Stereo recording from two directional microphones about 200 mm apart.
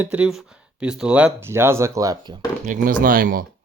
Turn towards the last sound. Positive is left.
turn(degrees=-45)  # may be behind; listen again after turning